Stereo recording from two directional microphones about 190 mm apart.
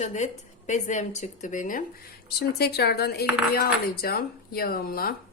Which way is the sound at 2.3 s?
55° left (ahead or behind).